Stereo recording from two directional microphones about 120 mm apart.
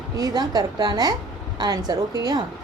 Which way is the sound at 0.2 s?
30° right (ahead or behind).